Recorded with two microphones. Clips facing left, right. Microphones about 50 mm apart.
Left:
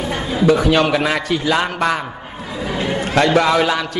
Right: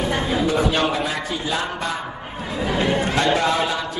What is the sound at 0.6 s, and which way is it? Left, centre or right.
A man's voice, left.